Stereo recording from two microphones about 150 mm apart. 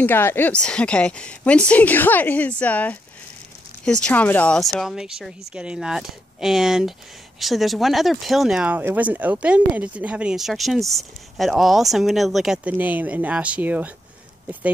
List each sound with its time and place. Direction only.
0.0 s a woman's voice: 15° left (ahead or behind)
4.7 s speech: 5° right (ahead or behind)